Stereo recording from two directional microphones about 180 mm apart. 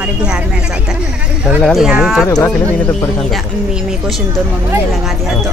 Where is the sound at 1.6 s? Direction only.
Centre (ahead or behind).